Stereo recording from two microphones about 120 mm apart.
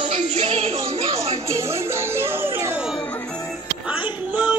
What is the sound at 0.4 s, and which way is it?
Music, 60° right (ahead or behind).